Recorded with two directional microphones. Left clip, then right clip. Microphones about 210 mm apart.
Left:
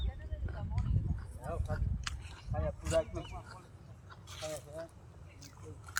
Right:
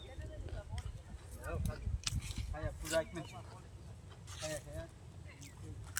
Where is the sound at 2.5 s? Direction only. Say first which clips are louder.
Left 7 dB; 70° right (ahead or behind).